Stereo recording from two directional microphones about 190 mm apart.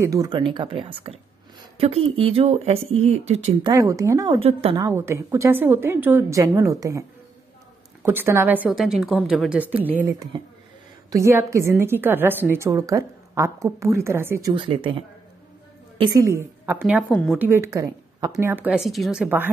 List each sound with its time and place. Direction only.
0.0 s a woman's voice: 20° right (ahead or behind); by 3.7 s 35° right (ahead or behind)
3.7 s a woman's voice: 20° right (ahead or behind)
4.4 s a woman's voice: 30° right (ahead or behind)
4.7 s a woman's voice: 15° right (ahead or behind)
14.5 s a woman's voice: 30° right (ahead or behind); by 17.0 s 10° right (ahead or behind)
17.1 s speech: 5° left (ahead or behind)
17.4 s a woman's voice: 15° right (ahead or behind)